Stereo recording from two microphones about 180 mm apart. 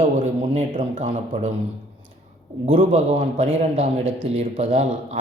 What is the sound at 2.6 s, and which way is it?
A man's voice, 35° right (ahead or behind).